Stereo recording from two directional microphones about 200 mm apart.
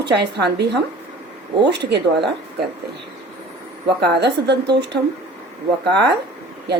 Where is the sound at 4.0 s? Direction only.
55° right (ahead or behind).